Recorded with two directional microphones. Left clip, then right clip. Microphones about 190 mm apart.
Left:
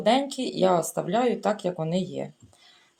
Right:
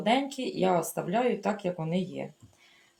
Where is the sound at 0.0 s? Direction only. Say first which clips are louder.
Left 4 dB; 40° left (ahead or behind).